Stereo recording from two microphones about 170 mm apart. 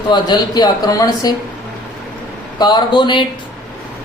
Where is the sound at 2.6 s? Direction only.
25° left (ahead or behind).